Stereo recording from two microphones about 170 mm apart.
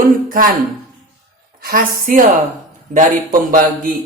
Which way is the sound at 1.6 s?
55° right (ahead or behind).